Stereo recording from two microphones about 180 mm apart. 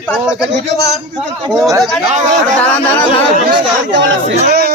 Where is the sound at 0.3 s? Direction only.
5° right (ahead or behind).